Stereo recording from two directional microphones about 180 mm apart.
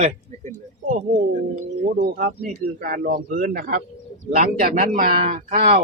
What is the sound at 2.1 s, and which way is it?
A man's voice, 55° right (ahead or behind).